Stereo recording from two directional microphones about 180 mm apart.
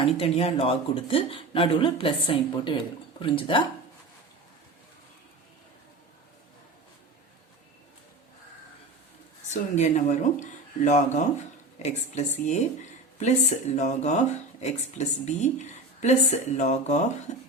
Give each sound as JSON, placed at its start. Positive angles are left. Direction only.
{"t": 0.0, "sound": "speech", "side_deg": 30}
{"t": 9.5, "sound": "speech", "side_deg": 40}
{"t": 13.7, "sound": "speech", "side_deg": 40}